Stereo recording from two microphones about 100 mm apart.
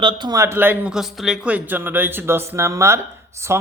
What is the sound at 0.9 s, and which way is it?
Speech, centre (ahead or behind).